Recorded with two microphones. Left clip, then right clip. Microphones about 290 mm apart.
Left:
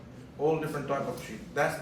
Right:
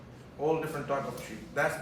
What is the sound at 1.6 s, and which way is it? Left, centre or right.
Speech, centre.